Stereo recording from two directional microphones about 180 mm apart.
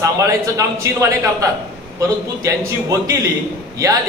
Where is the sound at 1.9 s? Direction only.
20° right (ahead or behind).